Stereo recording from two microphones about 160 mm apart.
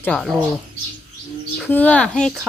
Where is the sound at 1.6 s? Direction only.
10° left (ahead or behind).